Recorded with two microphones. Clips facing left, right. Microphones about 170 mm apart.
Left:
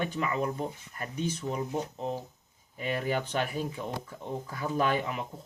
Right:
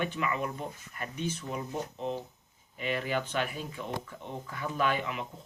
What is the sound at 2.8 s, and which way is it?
Speech, 40° left (ahead or behind).